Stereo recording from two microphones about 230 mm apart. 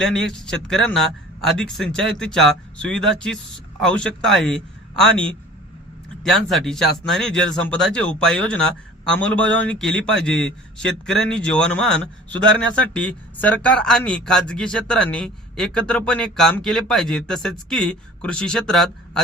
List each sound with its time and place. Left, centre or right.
0.0 s a man's voice: centre
6.2 s speech: centre